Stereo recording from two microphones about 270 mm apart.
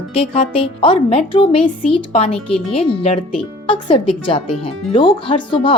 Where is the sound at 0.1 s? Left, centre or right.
Left.